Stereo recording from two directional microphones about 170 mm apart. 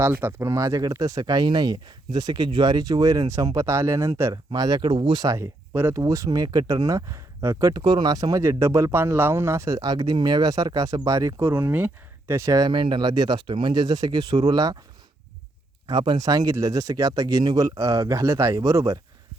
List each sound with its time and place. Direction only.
0.0 s speech: 10° right (ahead or behind)
15.9 s speech: 25° right (ahead or behind)